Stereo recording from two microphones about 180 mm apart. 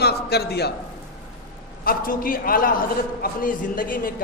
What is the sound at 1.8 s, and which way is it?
A man's voice, 50° left (ahead or behind).